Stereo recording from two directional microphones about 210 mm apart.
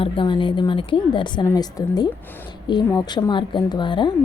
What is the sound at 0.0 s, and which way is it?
A woman's voice, 25° left (ahead or behind).